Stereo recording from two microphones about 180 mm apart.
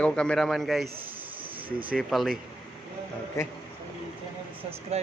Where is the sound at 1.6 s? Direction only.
30° right (ahead or behind).